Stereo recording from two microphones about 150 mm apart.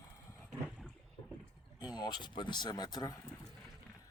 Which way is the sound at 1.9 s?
30° left (ahead or behind).